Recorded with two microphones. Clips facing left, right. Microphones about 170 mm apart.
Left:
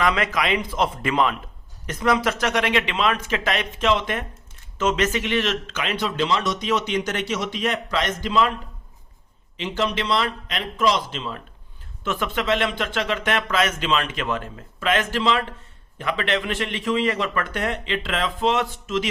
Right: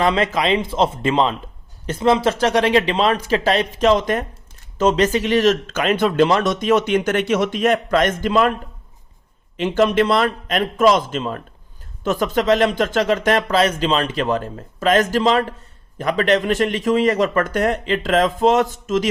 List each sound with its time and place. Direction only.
0.0 s speech: 30° right (ahead or behind); by 8.5 s 50° right (ahead or behind)
9.6 s speech: 50° right (ahead or behind)